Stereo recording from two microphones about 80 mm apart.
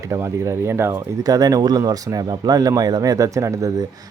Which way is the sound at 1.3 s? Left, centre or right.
Right.